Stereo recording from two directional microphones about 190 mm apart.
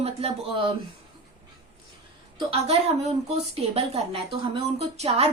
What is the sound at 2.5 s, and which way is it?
Speech, 35° right (ahead or behind).